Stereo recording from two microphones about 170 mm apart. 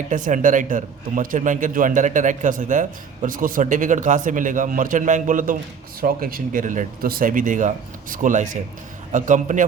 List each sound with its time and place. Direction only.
0.1 s a man's voice: 50° right (ahead or behind)